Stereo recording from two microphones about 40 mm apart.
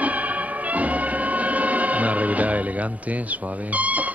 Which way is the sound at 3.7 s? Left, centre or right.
Right.